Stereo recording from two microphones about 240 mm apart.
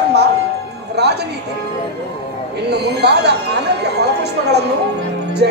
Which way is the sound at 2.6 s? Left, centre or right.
Right.